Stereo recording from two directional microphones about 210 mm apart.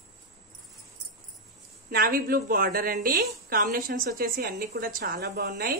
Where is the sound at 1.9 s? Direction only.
45° right (ahead or behind).